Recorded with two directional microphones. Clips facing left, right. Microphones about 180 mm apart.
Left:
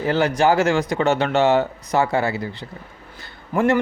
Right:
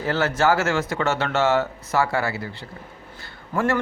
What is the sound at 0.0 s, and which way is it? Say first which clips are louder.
A man's voice: left 3 dB; 15° left (ahead or behind).